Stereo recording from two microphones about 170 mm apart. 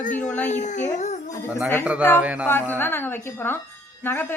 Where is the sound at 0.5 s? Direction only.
45° left (ahead or behind).